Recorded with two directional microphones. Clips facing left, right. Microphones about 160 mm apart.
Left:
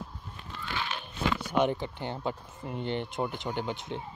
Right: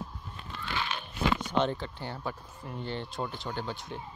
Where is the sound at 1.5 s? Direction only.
15° left (ahead or behind).